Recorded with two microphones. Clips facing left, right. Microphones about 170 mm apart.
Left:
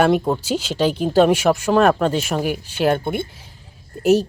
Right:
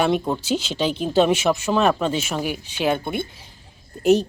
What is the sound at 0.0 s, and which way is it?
Speech, 10° left (ahead or behind).